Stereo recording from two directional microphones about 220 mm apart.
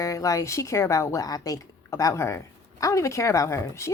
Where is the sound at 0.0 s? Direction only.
15° left (ahead or behind).